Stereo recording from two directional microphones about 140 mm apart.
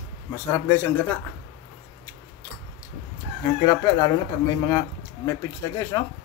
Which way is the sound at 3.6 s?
30° left (ahead or behind).